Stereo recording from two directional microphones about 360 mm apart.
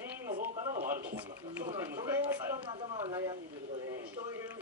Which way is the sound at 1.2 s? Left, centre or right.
Centre.